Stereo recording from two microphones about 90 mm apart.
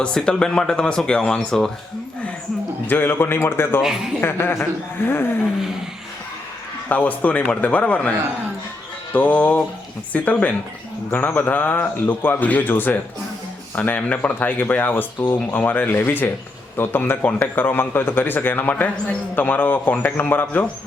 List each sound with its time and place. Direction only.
0.0 s a man's voice: 10° left (ahead or behind)
2.8 s a man's voice: 20° left (ahead or behind)
3.8 s speech: 5° right (ahead or behind)
4.2 s a man's voice: 25° left (ahead or behind)
6.8 s a man's voice: 20° left (ahead or behind)
9.1 s a man's voice: 15° left (ahead or behind)